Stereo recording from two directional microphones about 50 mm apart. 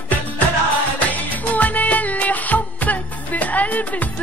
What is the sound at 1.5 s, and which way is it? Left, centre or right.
Music, left.